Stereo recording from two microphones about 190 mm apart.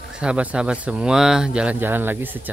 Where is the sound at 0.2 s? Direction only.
5° right (ahead or behind).